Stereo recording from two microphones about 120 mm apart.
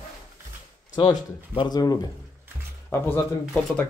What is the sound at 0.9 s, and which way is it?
Speech, 35° left (ahead or behind).